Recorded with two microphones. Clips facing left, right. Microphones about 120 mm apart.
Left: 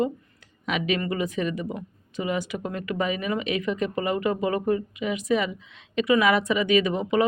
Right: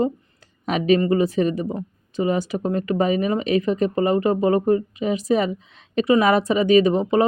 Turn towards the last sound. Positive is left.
turn(degrees=-35)  # may be behind; listen again after turning